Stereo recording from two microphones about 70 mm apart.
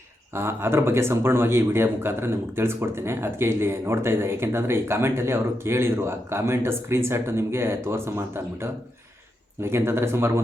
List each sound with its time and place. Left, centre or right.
0.3 s speech: right